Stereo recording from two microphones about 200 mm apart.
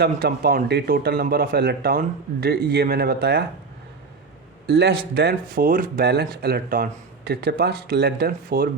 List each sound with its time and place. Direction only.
0.0 s speech: 50° right (ahead or behind)
4.6 s speech: 55° right (ahead or behind)